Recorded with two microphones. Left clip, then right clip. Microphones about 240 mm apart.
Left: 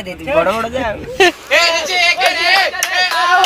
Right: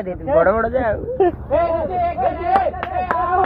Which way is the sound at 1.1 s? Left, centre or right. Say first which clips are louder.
Left 8 dB; left.